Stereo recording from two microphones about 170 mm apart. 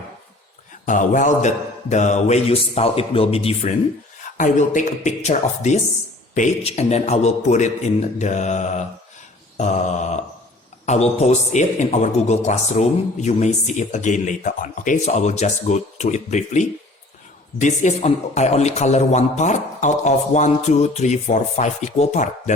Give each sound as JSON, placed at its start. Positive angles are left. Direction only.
{"t": 0.9, "sound": "a man's voice", "side_deg": 50}
{"t": 4.2, "sound": "a man's voice", "side_deg": 45}
{"t": 9.6, "sound": "a sound", "side_deg": 45}
{"t": 10.8, "sound": "a man's voice", "side_deg": 40}